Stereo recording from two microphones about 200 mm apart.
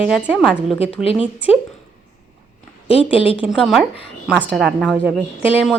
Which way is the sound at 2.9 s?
30° left (ahead or behind).